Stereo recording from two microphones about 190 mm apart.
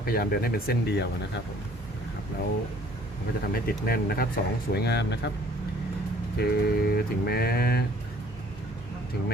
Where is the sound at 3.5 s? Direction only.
50° left (ahead or behind).